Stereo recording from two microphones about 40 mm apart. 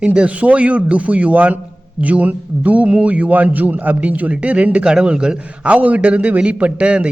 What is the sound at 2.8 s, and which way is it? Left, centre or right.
A man's voice, right.